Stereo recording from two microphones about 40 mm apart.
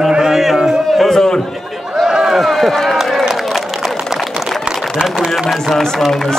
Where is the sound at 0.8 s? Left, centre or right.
Centre.